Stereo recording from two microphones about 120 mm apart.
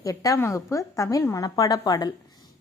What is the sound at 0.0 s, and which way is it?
A woman's voice, 30° left (ahead or behind).